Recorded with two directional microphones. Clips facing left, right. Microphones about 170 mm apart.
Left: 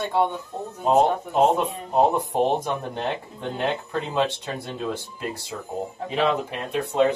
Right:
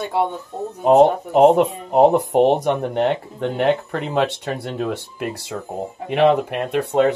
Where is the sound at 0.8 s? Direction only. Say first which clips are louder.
Right 6 dB; 65° right (ahead or behind).